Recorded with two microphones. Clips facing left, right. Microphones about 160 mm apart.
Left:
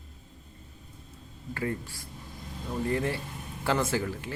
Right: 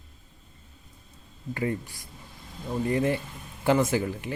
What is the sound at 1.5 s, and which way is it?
Speech, 15° right (ahead or behind).